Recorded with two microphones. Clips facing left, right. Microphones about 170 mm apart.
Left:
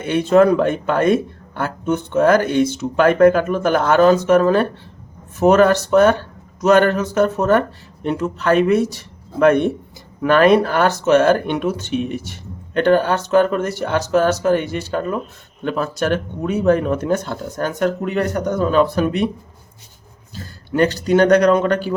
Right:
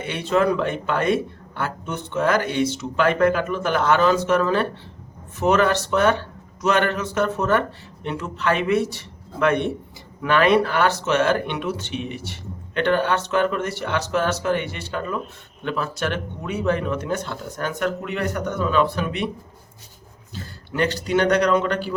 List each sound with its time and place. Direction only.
0.0 s speech: 45° left (ahead or behind)
20.3 s a man's voice: 40° left (ahead or behind)